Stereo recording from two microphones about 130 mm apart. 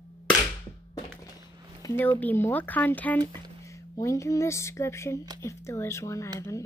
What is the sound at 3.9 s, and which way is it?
Speech, 25° left (ahead or behind).